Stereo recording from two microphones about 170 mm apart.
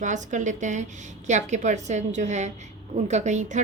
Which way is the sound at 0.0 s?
45° right (ahead or behind).